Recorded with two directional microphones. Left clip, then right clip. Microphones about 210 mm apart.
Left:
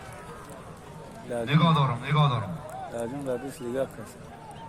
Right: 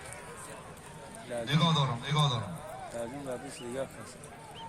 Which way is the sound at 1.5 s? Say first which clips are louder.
Left 5 dB; 50° right (ahead or behind).